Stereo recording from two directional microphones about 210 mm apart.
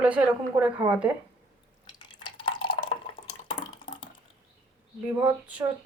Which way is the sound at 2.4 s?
25° left (ahead or behind).